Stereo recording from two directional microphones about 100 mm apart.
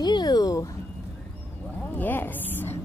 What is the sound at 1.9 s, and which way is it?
Speech, 20° left (ahead or behind).